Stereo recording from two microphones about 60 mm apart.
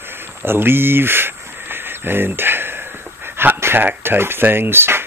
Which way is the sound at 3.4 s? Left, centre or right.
Right.